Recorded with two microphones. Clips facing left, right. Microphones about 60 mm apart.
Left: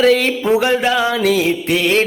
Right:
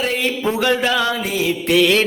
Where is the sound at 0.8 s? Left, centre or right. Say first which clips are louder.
Left 2 dB; centre.